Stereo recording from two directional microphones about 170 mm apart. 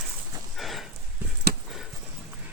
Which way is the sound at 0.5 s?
Centre (ahead or behind).